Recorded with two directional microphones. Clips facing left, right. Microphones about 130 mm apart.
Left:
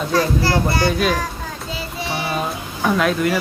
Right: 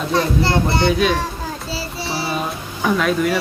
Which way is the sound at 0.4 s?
25° right (ahead or behind).